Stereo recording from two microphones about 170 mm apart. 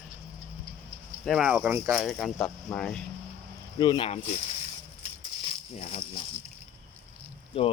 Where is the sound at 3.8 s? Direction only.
30° left (ahead or behind).